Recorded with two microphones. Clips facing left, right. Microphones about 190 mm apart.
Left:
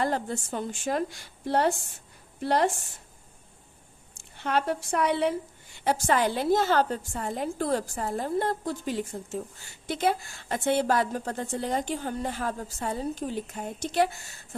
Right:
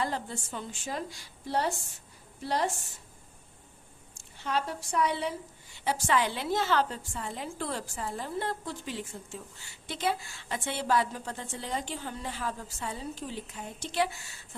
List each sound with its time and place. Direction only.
0.0 s a woman's voice: 50° left (ahead or behind)
4.1 s a woman's voice: 60° left (ahead or behind)
5.7 s a woman's voice: 50° left (ahead or behind)